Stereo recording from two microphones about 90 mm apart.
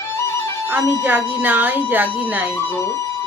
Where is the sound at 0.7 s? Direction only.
20° right (ahead or behind).